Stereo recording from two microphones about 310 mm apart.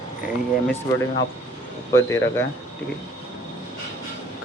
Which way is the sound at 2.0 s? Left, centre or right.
Centre.